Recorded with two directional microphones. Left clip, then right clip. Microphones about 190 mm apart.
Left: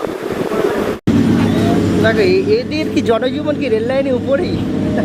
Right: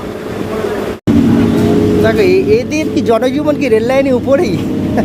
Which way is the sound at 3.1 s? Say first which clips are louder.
Right 4 dB; 25° right (ahead or behind).